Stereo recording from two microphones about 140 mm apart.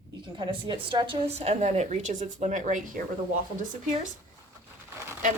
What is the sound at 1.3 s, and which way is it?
Speech, 50° right (ahead or behind).